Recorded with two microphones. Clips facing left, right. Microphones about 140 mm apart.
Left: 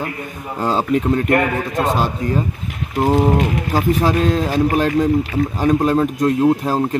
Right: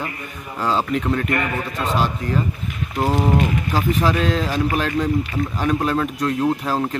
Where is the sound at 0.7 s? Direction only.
40° left (ahead or behind).